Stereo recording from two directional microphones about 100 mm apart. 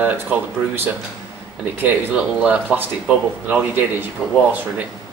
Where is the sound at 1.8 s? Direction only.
10° right (ahead or behind).